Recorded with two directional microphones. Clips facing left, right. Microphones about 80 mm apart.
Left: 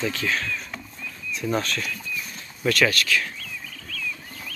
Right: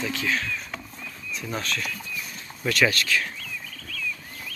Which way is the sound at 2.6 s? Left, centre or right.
Centre.